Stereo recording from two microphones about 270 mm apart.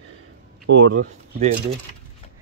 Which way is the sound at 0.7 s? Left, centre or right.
Right.